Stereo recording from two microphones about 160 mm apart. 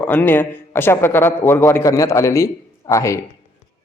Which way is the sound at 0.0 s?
10° left (ahead or behind).